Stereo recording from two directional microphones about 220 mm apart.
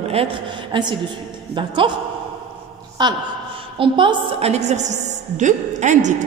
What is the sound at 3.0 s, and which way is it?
A woman's voice, 20° right (ahead or behind).